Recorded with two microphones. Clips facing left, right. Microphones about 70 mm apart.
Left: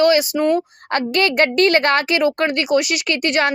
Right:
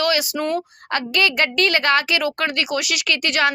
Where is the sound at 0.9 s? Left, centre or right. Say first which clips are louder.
Left 3 dB; left.